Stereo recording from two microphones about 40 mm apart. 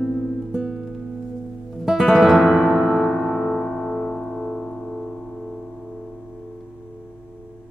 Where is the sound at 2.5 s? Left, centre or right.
Centre.